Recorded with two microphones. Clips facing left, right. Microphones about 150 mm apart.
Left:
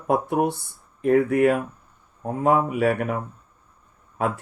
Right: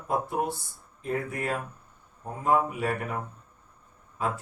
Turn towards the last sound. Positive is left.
turn(degrees=65)  # may be behind; listen again after turning